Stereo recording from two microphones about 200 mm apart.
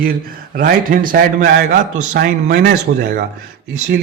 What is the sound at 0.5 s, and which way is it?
A man's voice, 45° right (ahead or behind).